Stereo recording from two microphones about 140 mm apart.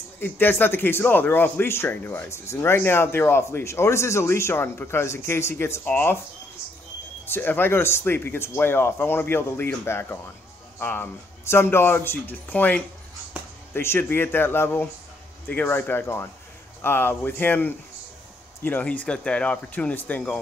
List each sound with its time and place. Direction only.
0.2 s speech: 15° left (ahead or behind)
7.2 s speech: 15° left (ahead or behind)